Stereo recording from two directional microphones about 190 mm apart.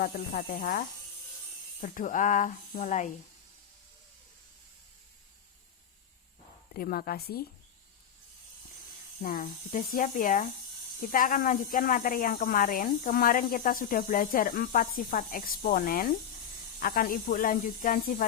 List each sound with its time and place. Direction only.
0.0 s speech: 50° left (ahead or behind)
6.7 s speech: 50° left (ahead or behind)
9.2 s speech: 45° left (ahead or behind)